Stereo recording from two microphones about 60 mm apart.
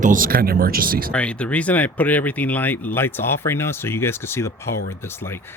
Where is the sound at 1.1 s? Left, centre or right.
Left.